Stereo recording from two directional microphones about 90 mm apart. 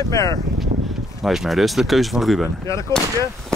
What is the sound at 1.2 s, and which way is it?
Speech, centre (ahead or behind).